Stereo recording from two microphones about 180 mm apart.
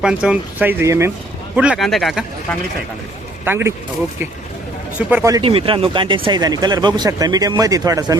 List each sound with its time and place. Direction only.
0.0 s speech: 5° right (ahead or behind)
3.4 s speech: 15° right (ahead or behind)
4.9 s speech: 10° right (ahead or behind)
5.4 s speech: 30° right (ahead or behind)